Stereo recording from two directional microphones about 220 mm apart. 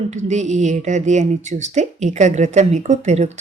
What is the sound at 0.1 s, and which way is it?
A woman's voice, 30° right (ahead or behind).